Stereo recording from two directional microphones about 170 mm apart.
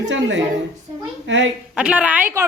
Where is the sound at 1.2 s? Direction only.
90° right.